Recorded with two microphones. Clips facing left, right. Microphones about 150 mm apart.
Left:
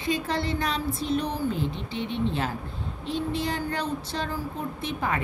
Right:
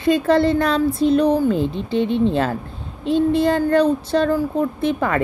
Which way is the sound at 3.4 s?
55° right (ahead or behind).